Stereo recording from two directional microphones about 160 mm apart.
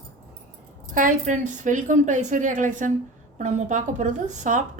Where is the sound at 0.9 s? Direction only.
55° right (ahead or behind).